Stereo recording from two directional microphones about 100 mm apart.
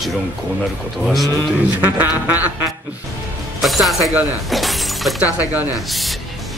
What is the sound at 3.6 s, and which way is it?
Speech, centre (ahead or behind).